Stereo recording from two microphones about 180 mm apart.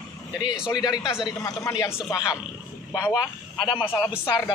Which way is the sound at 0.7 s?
20° left (ahead or behind).